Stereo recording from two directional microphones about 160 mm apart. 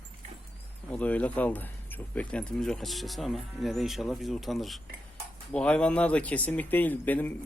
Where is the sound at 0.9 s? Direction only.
10° left (ahead or behind).